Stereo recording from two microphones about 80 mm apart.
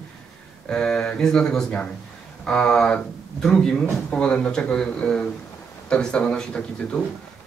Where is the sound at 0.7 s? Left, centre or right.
Centre.